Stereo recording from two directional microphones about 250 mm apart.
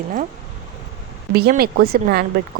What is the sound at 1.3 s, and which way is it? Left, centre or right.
Speech, right.